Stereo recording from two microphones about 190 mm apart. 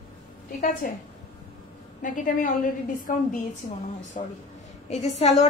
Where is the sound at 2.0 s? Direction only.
45° left (ahead or behind).